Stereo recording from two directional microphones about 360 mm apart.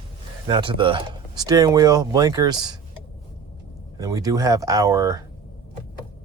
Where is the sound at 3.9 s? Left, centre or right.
Centre.